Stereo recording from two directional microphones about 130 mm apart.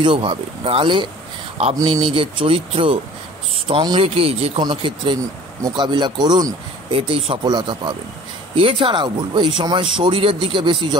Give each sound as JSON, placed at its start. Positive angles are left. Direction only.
{"t": 0.0, "sound": "speech", "side_deg": -40}
{"t": 4.6, "sound": "speech", "side_deg": -35}